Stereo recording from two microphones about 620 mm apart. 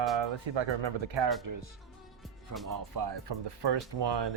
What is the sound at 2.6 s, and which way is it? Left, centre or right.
Speech, right.